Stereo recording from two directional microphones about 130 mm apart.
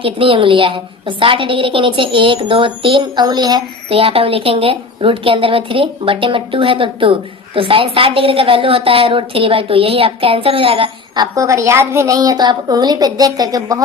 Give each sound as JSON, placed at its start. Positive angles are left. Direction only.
{"t": 0.0, "sound": "a woman's voice", "side_deg": -40}
{"t": 3.8, "sound": "a woman's voice", "side_deg": -45}